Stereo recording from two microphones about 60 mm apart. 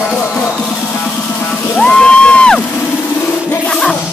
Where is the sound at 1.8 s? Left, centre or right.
Centre.